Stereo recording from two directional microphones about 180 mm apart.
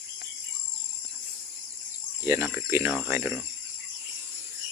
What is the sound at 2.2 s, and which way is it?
Speech, 15° right (ahead or behind).